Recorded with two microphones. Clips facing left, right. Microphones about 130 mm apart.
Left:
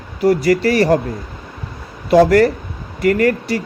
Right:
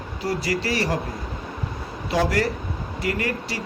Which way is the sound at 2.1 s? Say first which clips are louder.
Left 12 dB; 60° left (ahead or behind).